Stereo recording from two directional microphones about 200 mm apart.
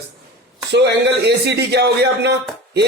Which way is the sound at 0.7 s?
60° right (ahead or behind).